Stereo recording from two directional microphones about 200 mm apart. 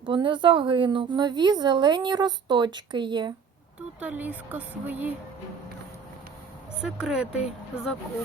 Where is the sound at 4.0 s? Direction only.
10° right (ahead or behind).